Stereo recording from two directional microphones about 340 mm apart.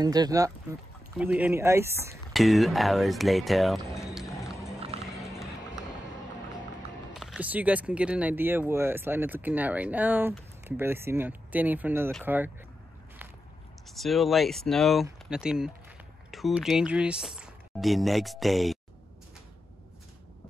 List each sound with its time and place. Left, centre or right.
0.0 s speech: centre
4.7 s music: centre
5.1 s music: centre
7.2 s speech: centre
13.8 s speech: centre